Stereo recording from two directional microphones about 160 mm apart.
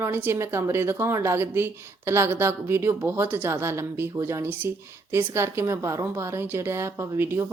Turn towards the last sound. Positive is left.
turn(degrees=-15)  # may be behind; listen again after turning